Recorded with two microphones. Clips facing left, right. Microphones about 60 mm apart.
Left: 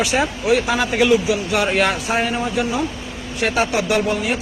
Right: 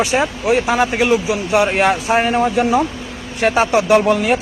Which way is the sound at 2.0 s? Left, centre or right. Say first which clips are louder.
Right 5 dB; right.